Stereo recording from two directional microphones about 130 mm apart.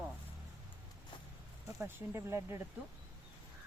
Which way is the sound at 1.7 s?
20° right (ahead or behind).